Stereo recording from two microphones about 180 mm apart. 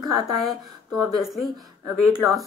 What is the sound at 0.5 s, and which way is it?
Speech, 20° right (ahead or behind).